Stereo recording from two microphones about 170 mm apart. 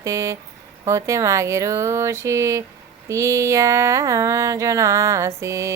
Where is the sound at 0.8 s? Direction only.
15° right (ahead or behind).